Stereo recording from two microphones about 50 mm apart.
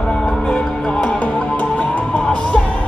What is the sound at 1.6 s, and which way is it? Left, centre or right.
Music, left.